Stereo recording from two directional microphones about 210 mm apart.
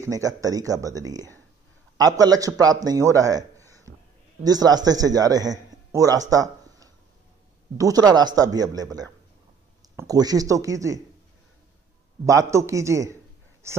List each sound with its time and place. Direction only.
0.0 s a man's voice: 15° right (ahead or behind)
9.9 s a man's voice: 15° right (ahead or behind)
12.3 s a man's voice: 15° right (ahead or behind)